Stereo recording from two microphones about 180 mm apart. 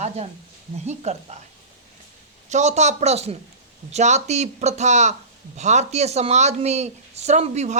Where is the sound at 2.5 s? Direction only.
40° right (ahead or behind).